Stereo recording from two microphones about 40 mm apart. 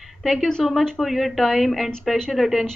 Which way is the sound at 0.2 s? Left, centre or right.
Centre.